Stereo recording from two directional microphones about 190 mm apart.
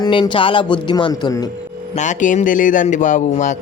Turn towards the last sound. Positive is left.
turn(degrees=40)  # may be behind; listen again after turning